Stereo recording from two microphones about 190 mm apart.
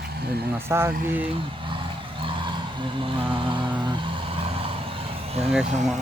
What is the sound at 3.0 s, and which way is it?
Mantra, 25° right (ahead or behind).